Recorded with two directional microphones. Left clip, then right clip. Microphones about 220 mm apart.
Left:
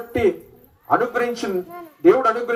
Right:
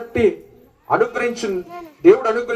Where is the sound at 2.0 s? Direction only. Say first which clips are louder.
Right 2 dB; 45° left (ahead or behind).